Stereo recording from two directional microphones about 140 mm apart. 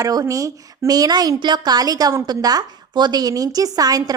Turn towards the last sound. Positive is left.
turn(degrees=-25)  # may be behind; listen again after turning